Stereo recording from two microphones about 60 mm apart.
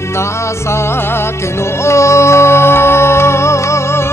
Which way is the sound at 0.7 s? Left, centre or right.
Left.